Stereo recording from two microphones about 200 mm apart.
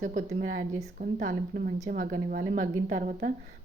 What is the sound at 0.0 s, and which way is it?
A woman's voice, 40° right (ahead or behind).